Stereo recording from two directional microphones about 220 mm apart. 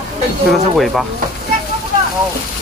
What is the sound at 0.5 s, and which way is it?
Speech, centre (ahead or behind).